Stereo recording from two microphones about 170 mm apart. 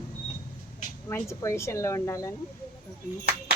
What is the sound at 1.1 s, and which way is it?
A woman's voice, 15° left (ahead or behind).